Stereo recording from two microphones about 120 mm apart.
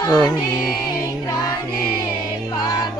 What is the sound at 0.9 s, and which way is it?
Choir, 30° left (ahead or behind).